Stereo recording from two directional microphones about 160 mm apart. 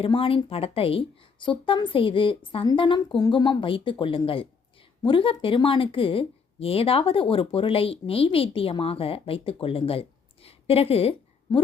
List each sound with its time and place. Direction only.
0.0 s speech: 35° left (ahead or behind)
11.5 s a woman's voice: 25° left (ahead or behind)